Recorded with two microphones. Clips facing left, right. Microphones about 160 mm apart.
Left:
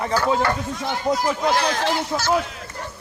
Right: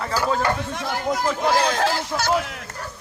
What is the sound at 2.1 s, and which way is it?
Speech, 25° left (ahead or behind).